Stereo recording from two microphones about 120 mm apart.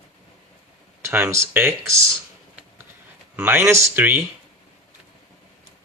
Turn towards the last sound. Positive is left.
turn(degrees=-15)  # may be behind; listen again after turning